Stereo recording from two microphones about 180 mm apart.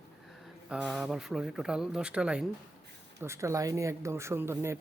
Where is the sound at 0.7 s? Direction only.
5° right (ahead or behind).